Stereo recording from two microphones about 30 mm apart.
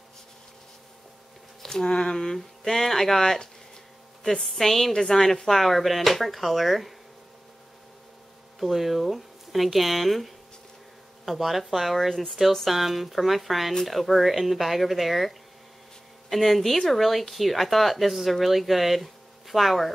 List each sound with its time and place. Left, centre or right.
1.6 s a sound: centre
2.0 s speech: left
4.2 s a sound: centre
4.5 s speech: centre
5.5 s speech: centre
8.5 s speech: centre